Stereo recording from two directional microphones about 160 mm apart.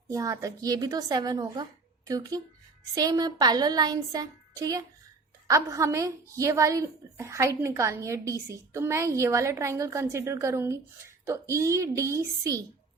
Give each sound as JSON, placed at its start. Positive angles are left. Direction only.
{"t": 0.1, "sound": "a woman's voice", "side_deg": -20}